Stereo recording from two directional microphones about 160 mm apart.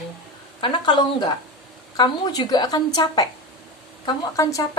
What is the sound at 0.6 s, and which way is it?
A woman's voice, 30° left (ahead or behind).